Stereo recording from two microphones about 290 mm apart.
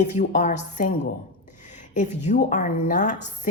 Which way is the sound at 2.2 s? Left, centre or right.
Left.